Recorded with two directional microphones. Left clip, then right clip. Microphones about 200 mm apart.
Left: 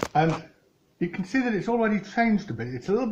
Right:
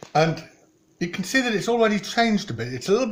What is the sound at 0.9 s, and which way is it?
Speech, 60° right (ahead or behind).